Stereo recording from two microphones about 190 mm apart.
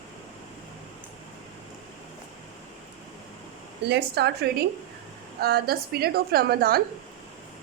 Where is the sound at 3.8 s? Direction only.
60° right (ahead or behind).